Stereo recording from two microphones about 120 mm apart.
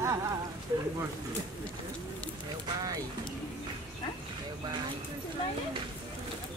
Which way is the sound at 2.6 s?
30° right (ahead or behind).